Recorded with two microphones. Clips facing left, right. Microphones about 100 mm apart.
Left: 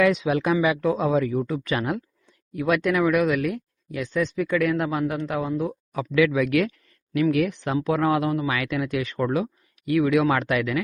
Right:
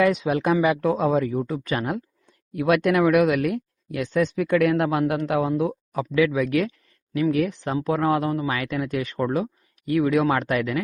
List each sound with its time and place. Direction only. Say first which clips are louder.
0.0 s speech: even; 40° right (ahead or behind)
2.6 s speech: right 2 dB; 55° right (ahead or behind)
5.5 s speech: right 3 dB; 15° right (ahead or behind)
6.1 s speech: left 1 dB; 30° right (ahead or behind)